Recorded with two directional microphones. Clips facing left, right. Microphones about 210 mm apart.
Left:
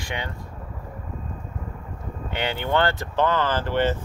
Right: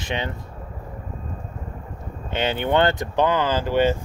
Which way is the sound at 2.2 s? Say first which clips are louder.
Right 4 dB; 20° right (ahead or behind).